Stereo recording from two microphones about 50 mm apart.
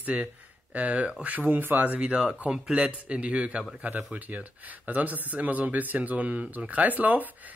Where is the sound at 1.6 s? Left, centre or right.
Right.